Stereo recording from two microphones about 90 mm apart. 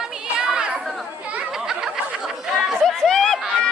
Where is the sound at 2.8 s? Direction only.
5° left (ahead or behind).